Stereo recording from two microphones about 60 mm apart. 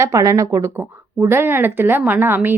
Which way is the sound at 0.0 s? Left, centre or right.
Right.